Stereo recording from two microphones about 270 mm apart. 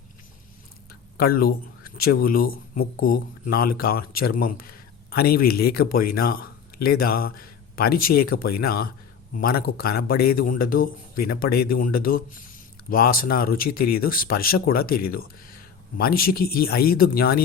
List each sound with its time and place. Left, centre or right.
1.1 s speech: left